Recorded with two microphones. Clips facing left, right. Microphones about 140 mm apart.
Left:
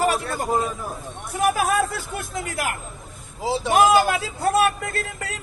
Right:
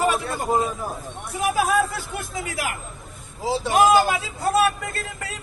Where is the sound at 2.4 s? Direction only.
50° left (ahead or behind).